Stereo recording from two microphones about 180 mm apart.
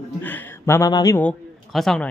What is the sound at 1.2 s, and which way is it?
Speech, 5° left (ahead or behind).